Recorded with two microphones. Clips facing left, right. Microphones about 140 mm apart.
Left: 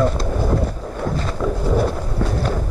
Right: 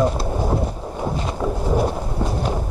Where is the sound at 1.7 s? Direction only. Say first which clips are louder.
Left 1 dB; 15° right (ahead or behind).